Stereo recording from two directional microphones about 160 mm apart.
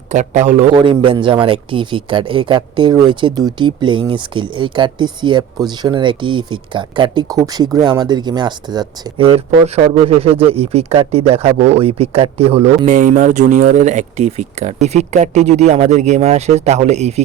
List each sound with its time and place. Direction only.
0.1 s a man's voice: 45° right (ahead or behind)
0.8 s speech: 30° right (ahead or behind)